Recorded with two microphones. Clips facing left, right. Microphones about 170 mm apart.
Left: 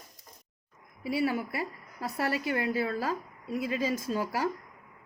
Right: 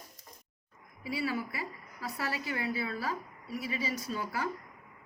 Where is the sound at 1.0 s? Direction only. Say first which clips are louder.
Left 5 dB; 55° left (ahead or behind).